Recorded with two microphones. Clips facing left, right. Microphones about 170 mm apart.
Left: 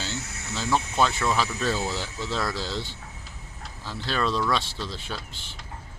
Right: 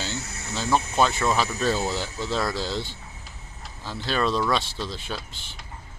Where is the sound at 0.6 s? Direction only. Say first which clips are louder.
Right 2 dB; 20° right (ahead or behind).